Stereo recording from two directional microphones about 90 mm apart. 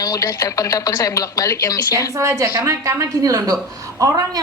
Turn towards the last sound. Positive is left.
turn(degrees=-40)  # may be behind; listen again after turning